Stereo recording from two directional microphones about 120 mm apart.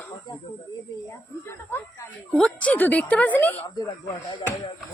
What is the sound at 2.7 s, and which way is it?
Speech, 15° left (ahead or behind).